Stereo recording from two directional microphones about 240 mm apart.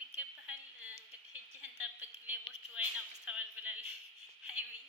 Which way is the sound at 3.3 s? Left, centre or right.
Centre.